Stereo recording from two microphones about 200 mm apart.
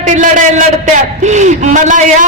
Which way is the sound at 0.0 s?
40° right (ahead or behind).